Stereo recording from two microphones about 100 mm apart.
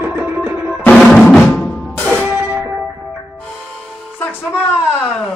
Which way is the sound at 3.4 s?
10° left (ahead or behind).